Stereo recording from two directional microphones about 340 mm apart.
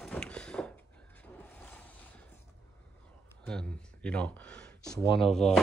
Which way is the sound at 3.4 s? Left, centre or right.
Centre.